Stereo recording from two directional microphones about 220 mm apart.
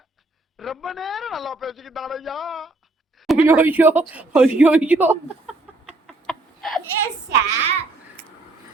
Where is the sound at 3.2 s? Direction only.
5° right (ahead or behind).